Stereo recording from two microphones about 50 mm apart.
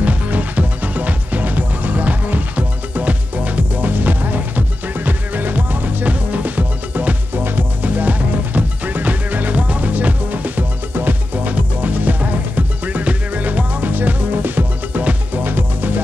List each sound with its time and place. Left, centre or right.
0.0 s music: right